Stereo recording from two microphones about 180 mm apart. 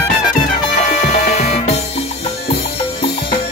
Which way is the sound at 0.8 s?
40° left (ahead or behind).